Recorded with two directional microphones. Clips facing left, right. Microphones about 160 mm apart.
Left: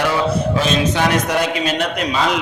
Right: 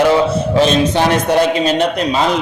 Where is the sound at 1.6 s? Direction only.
35° right (ahead or behind).